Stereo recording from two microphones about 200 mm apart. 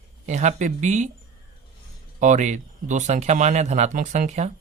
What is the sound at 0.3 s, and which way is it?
Speech, 35° right (ahead or behind).